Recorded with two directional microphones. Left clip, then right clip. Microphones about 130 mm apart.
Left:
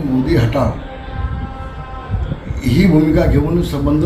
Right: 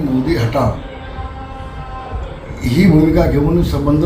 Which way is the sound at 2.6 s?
5° right (ahead or behind).